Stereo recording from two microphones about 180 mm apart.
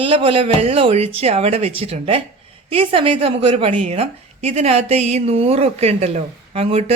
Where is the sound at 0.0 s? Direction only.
30° right (ahead or behind).